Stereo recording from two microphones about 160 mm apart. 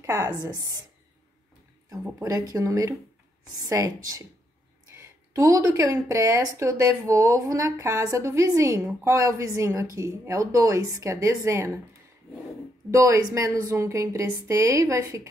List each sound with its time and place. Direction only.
0.0 s a woman's voice: 15° right (ahead or behind)
1.9 s a woman's voice: 20° right (ahead or behind)
12.9 s a woman's voice: 20° right (ahead or behind)